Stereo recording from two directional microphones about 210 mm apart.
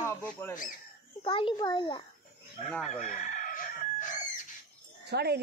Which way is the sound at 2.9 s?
35° left (ahead or behind).